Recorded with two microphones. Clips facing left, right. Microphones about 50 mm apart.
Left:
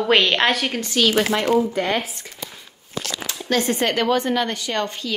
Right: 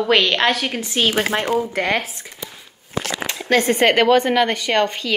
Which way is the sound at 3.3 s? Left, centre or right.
Right.